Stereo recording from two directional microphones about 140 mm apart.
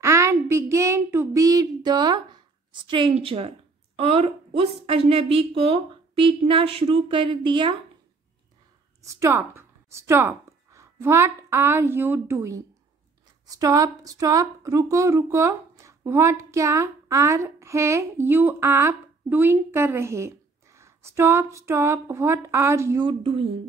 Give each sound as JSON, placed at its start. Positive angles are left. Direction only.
{"t": 0.0, "sound": "a woman's voice", "side_deg": -20}
{"t": 9.0, "sound": "speech", "side_deg": -20}
{"t": 23.0, "sound": "a woman's voice", "side_deg": -40}